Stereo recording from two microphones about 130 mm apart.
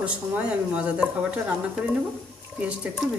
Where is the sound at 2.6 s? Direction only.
5° right (ahead or behind).